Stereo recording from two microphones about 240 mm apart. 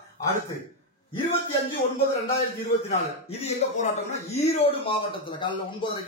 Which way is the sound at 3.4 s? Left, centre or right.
Left.